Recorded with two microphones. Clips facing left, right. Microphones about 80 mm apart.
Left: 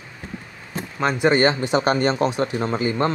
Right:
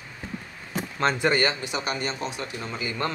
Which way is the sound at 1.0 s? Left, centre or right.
Centre.